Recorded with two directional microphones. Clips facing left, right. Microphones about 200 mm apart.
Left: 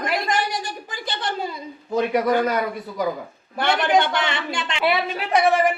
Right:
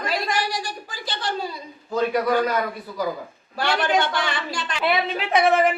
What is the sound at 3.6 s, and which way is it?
A woman's voice, 20° left (ahead or behind).